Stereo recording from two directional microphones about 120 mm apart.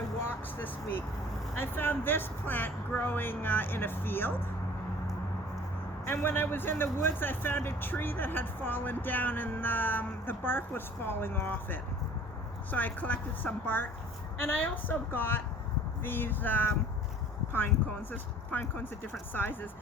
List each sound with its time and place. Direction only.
0.3 s speech: 15° left (ahead or behind)
6.1 s speech: 20° left (ahead or behind)
18.1 s speech: 15° left (ahead or behind)